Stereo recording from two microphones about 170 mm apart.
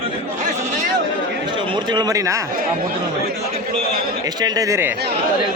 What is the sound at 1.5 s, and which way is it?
Speech, 30° right (ahead or behind).